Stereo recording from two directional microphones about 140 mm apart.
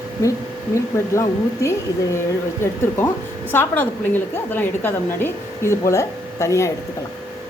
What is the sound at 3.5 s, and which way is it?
A woman's voice, 15° left (ahead or behind).